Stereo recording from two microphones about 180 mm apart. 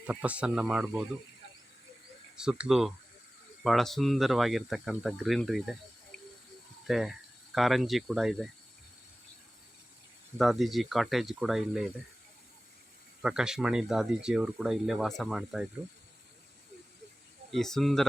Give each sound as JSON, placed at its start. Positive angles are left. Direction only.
{"t": 0.1, "sound": "speech", "side_deg": -5}
{"t": 2.3, "sound": "speech", "side_deg": -5}
{"t": 6.8, "sound": "speech", "side_deg": 0}
{"t": 10.3, "sound": "speech", "side_deg": 0}
{"t": 13.2, "sound": "speech", "side_deg": -5}
{"t": 17.5, "sound": "speech", "side_deg": 0}